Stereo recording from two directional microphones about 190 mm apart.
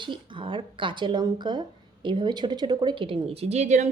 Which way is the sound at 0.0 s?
25° right (ahead or behind).